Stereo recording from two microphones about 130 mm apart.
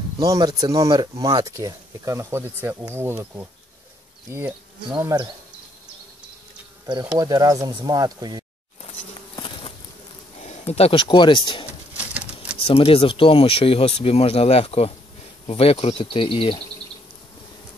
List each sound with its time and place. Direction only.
0.2 s speech: 30° right (ahead or behind)
4.9 s speech: 30° right (ahead or behind)
6.9 s speech: 30° right (ahead or behind)
9.3 s insect: 40° left (ahead or behind)
10.4 s speech: 55° left (ahead or behind); by 11.6 s 40° left (ahead or behind)
12.6 s speech: 45° left (ahead or behind)